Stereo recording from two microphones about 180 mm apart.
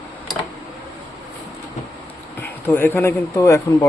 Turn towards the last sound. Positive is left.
turn(degrees=15)  # may be behind; listen again after turning